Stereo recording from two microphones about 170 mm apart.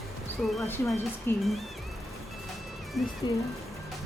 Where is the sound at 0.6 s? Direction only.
15° left (ahead or behind).